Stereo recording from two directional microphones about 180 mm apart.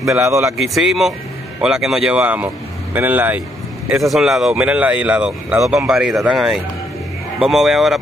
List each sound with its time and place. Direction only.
0.2 s speech: 15° right (ahead or behind)
0.6 s speech: centre (ahead or behind)